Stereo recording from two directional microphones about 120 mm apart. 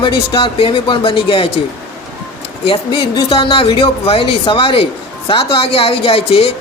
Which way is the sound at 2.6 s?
50° left (ahead or behind).